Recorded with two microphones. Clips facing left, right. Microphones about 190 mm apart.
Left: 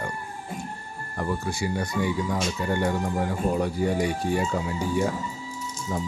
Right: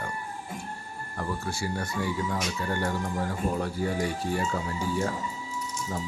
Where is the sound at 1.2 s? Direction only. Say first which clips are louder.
Left 4 dB; 15° left (ahead or behind).